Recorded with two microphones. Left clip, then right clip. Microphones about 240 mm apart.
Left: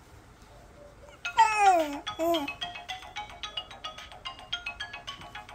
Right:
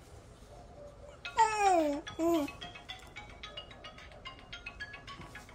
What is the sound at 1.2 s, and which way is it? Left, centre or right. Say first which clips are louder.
Babbling: left 6 dB; left.